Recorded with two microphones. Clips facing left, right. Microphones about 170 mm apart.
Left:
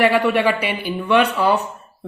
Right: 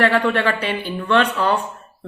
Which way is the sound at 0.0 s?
10° left (ahead or behind).